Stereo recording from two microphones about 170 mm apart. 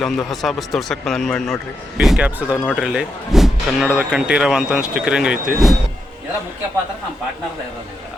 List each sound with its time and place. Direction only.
0.0 s speech: centre (ahead or behind)